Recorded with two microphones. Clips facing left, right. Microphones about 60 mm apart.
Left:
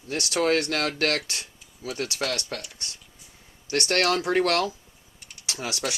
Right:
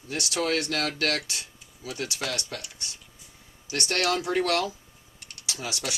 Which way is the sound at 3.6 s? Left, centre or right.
Left.